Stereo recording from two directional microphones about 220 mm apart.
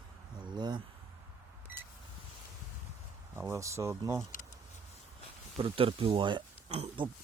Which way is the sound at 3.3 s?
10° right (ahead or behind).